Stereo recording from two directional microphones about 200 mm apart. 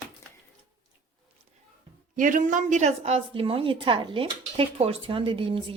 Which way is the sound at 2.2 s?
40° right (ahead or behind).